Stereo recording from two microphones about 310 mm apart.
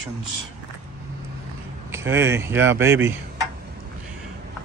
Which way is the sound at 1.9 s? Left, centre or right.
Centre.